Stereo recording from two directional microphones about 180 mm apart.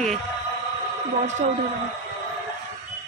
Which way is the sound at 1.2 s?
40° right (ahead or behind).